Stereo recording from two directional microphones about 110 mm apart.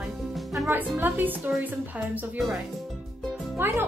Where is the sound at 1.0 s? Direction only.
15° right (ahead or behind).